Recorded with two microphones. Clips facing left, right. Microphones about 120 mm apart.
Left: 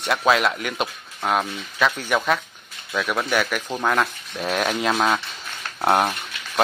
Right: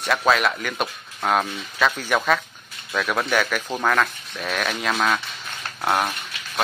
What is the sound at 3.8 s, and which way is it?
Speech, 20° left (ahead or behind).